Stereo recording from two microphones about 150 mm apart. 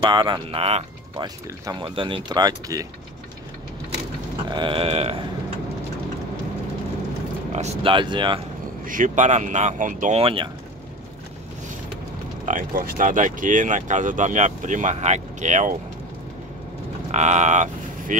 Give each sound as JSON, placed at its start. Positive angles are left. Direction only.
{"t": 0.0, "sound": "speech", "side_deg": -30}
{"t": 1.1, "sound": "speech", "side_deg": -25}
{"t": 4.5, "sound": "speech", "side_deg": -30}
{"t": 7.5, "sound": "speech", "side_deg": -45}
{"t": 7.9, "sound": "speech", "side_deg": -30}
{"t": 8.8, "sound": "speech", "side_deg": -60}
{"t": 10.1, "sound": "speech", "side_deg": -35}
{"t": 12.4, "sound": "speech", "side_deg": -70}
{"t": 17.1, "sound": "speech", "side_deg": -50}